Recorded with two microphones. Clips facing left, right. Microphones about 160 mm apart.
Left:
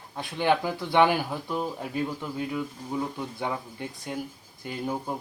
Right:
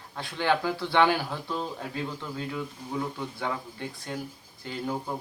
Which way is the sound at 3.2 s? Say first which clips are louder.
Left 1 dB; 15° left (ahead or behind).